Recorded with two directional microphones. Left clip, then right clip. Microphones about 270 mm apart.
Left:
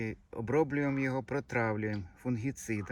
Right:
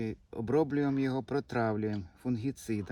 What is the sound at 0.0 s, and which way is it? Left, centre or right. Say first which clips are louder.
Speech: right 1 dB; centre.